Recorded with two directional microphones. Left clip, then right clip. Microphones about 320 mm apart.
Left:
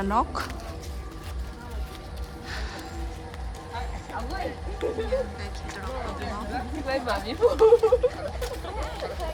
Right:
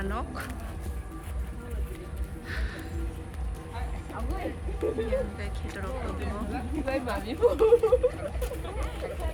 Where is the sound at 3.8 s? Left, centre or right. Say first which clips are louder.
Left 5 dB; left.